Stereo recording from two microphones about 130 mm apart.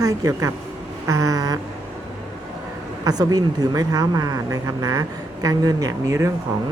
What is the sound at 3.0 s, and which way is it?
Speech, 30° right (ahead or behind).